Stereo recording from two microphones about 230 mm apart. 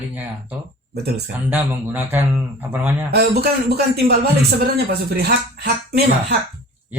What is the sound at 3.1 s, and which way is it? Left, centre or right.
Speech, right.